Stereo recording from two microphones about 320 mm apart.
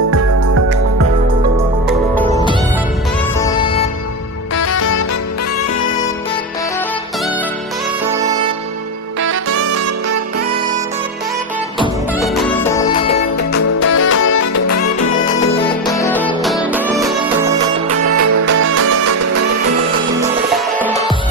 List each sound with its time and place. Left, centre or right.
3.3 s music: centre
4.6 s music: left
9.3 s saxophone: right
12.2 s music: centre
13.4 s music: left
14.2 s music: left
15.6 s music: centre
18.1 s music: right
18.6 s music: right